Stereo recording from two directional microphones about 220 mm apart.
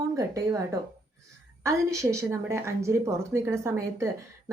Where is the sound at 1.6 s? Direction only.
15° right (ahead or behind).